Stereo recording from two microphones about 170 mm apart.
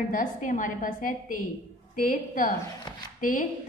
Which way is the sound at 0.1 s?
50° left (ahead or behind).